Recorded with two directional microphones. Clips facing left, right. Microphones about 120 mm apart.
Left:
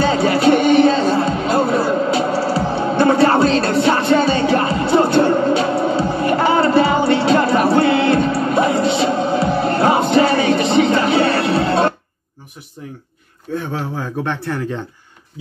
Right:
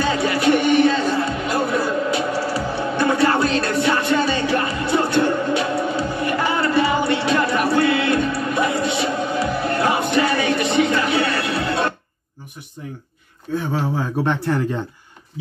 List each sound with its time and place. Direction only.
0.0 s music: 30° left (ahead or behind)
13.5 s speech: centre (ahead or behind)